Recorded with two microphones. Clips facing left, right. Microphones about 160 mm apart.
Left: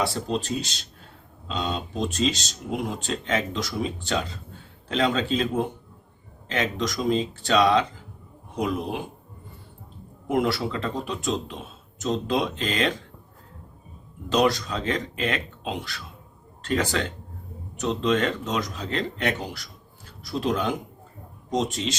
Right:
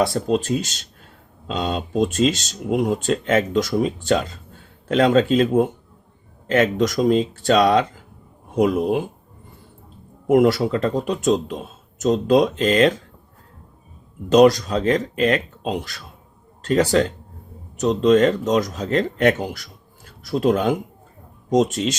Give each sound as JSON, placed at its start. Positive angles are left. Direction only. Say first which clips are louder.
{"t": 0.0, "sound": "a man's voice", "louder": "right 7 dB", "side_deg": -45}
{"t": 10.2, "sound": "a man's voice", "louder": "right 9 dB", "side_deg": -45}
{"t": 14.3, "sound": "a man's voice", "louder": "right 9 dB", "side_deg": -40}